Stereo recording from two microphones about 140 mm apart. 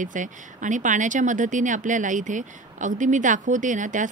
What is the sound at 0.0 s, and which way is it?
Speech, 65° right (ahead or behind).